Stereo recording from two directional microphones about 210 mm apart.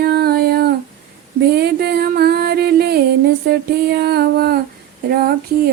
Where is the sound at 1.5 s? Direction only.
50° right (ahead or behind).